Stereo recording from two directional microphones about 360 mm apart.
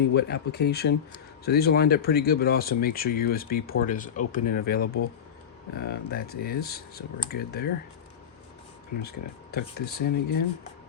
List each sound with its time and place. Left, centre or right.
0.1 s speech: left
9.0 s speech: left